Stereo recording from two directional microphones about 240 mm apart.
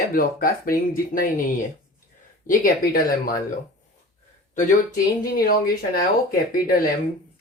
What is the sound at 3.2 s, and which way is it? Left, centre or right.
Speech, left.